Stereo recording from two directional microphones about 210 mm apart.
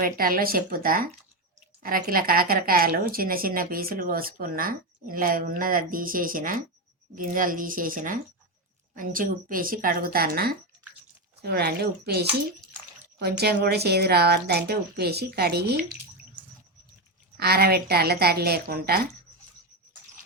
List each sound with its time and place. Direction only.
0.0 s speech: 45° right (ahead or behind)
17.3 s speech: 50° right (ahead or behind)